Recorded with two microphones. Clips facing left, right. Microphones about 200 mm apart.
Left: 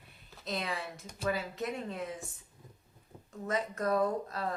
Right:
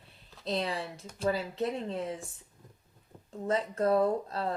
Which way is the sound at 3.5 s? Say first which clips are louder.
Right 4 dB; 30° right (ahead or behind).